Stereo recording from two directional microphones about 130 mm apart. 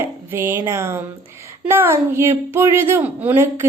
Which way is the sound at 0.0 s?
15° right (ahead or behind).